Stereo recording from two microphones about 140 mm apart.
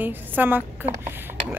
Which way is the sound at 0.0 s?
15° right (ahead or behind).